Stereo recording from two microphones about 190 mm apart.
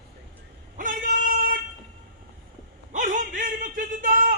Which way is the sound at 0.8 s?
45° right (ahead or behind).